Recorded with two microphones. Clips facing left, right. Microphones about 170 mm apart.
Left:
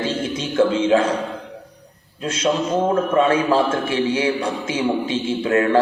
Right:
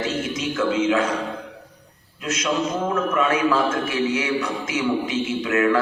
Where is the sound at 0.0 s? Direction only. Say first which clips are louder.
Left 2 dB; 30° left (ahead or behind).